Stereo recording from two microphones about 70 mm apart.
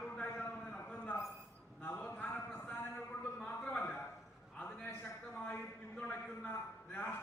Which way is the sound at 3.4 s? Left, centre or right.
Centre.